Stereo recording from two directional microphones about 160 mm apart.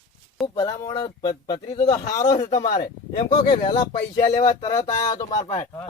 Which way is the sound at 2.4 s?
45° left (ahead or behind).